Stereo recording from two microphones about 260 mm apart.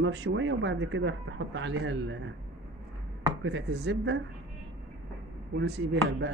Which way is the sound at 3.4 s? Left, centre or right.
Right.